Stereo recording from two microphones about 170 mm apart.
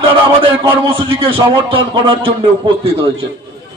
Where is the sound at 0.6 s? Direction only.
30° right (ahead or behind).